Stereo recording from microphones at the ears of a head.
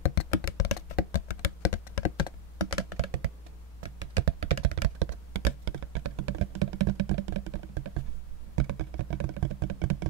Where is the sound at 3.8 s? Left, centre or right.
Right.